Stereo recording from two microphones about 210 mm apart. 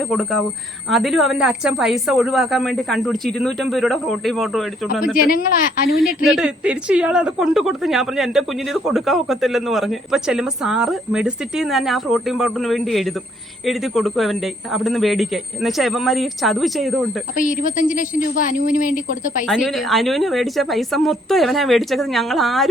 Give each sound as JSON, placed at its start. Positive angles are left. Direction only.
{"t": 0.1, "sound": "a woman's voice", "side_deg": 0}
{"t": 5.1, "sound": "speech", "side_deg": 40}
{"t": 6.2, "sound": "a woman's voice", "side_deg": -5}
{"t": 17.3, "sound": "a woman's voice", "side_deg": 40}
{"t": 19.5, "sound": "a woman's voice", "side_deg": 0}